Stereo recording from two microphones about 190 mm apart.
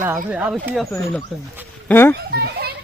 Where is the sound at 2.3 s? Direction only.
55° right (ahead or behind).